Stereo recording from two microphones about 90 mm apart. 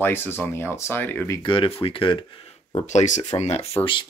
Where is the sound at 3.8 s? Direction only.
65° left (ahead or behind).